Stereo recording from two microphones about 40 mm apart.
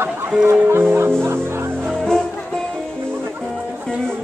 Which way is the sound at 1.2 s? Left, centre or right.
Right.